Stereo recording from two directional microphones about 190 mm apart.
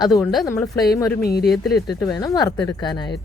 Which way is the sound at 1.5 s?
Centre (ahead or behind).